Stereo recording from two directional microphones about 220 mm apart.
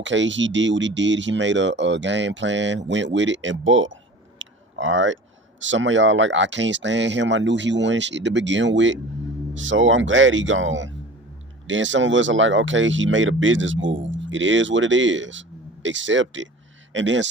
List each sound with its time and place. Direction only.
0.0 s speech: 55° right (ahead or behind)